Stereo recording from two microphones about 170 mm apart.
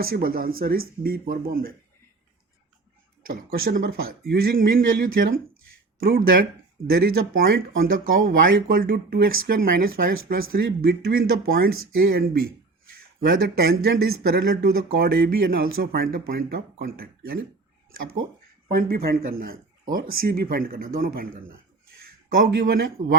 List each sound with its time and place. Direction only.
0.0 s speech: 60° right (ahead or behind)
3.2 s speech: 60° right (ahead or behind)
18.8 s speech: 60° right (ahead or behind)
22.4 s speech: 65° right (ahead or behind)